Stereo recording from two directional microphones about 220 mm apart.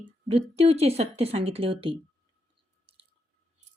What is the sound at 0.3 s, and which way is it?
A woman's voice, 25° right (ahead or behind).